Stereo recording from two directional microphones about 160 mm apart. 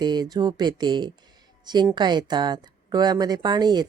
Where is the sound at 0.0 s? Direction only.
25° right (ahead or behind).